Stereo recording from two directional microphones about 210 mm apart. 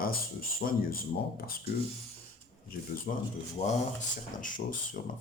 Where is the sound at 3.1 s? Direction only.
40° left (ahead or behind).